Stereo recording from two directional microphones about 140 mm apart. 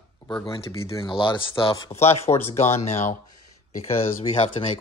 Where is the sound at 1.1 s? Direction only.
35° left (ahead or behind).